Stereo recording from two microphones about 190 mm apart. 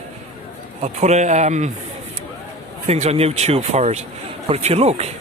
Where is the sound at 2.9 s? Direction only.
35° right (ahead or behind).